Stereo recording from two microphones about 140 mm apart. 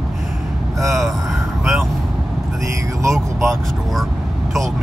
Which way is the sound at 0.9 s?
Centre (ahead or behind).